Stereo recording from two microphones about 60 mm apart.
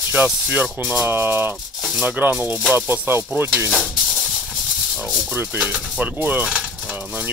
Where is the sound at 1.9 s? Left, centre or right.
Centre; by 3.2 s right.